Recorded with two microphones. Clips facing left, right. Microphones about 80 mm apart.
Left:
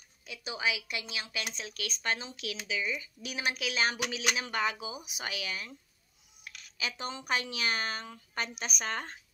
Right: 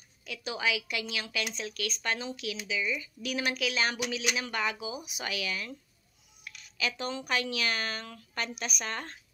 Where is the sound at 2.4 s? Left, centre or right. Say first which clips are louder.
Right 2 dB; left.